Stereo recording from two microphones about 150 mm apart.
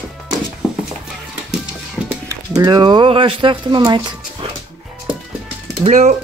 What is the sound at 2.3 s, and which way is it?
Speech, 25° right (ahead or behind).